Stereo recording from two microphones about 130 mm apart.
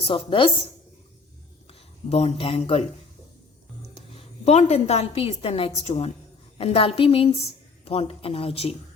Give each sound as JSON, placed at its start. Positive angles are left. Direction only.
{"t": 0.0, "sound": "speech", "side_deg": 45}
{"t": 1.6, "sound": "speech", "side_deg": 50}
{"t": 4.1, "sound": "a woman's voice", "side_deg": 55}